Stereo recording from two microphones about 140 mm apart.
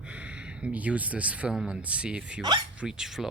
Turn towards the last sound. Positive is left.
turn(degrees=-5)  # may be behind; listen again after turning